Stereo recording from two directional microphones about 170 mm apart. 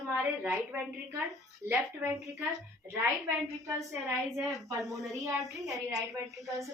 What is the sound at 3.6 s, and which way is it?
Speech, 15° right (ahead or behind).